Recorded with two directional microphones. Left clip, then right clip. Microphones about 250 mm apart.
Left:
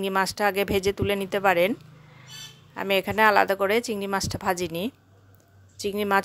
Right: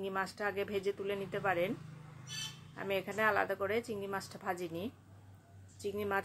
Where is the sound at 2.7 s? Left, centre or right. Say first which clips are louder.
Left 13 dB; left.